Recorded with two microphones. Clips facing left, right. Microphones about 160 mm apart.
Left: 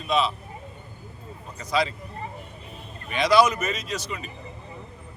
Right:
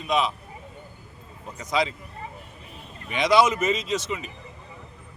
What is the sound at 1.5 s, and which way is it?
Speech, 20° right (ahead or behind).